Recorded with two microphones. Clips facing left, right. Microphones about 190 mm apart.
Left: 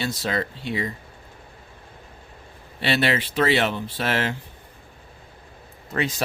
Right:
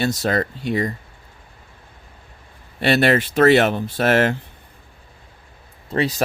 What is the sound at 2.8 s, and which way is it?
Speech, 50° right (ahead or behind).